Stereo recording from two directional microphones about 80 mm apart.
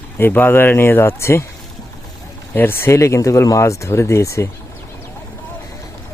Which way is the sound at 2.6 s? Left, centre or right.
Left.